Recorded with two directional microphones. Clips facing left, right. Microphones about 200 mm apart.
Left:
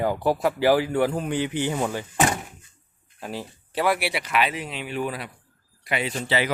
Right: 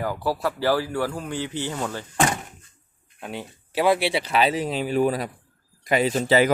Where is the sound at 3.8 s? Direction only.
25° right (ahead or behind).